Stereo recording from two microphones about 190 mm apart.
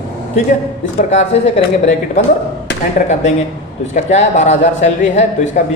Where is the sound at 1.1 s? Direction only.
35° left (ahead or behind).